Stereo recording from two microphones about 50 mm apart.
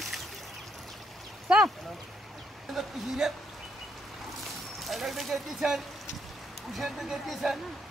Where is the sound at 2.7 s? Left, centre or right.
Centre.